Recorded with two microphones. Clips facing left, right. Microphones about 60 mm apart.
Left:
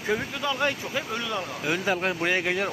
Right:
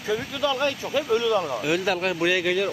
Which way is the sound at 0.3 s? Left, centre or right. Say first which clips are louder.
Right 2 dB; left.